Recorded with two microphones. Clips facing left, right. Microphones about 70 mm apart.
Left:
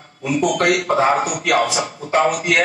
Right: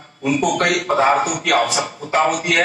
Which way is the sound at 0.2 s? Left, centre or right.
Right.